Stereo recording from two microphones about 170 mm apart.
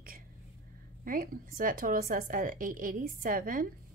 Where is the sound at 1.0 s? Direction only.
55° right (ahead or behind).